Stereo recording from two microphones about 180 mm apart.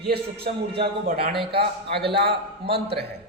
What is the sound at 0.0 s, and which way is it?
A man's voice, 60° right (ahead or behind).